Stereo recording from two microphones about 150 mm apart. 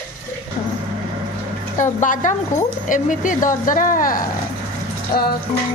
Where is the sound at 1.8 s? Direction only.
55° left (ahead or behind).